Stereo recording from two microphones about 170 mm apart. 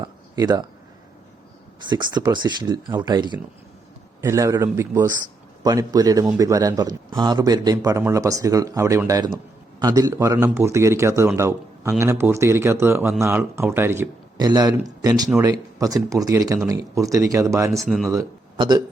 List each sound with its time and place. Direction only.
0.0 s a sound: 20° right (ahead or behind)
1.9 s a man's voice: 25° right (ahead or behind)
14.3 s a man's voice: 25° right (ahead or behind)
17.8 s speech: centre (ahead or behind)
18.1 s speech: 20° right (ahead or behind)